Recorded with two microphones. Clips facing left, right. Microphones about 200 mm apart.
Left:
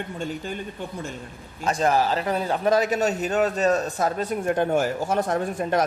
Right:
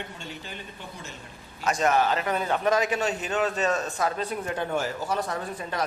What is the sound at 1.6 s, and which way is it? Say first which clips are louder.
A man's voice: left 2 dB; 30° left (ahead or behind).